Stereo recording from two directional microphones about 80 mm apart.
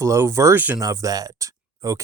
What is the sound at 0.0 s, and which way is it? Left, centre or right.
Speech, right.